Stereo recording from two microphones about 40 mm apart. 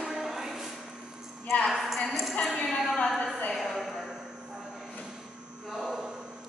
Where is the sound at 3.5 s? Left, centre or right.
Centre.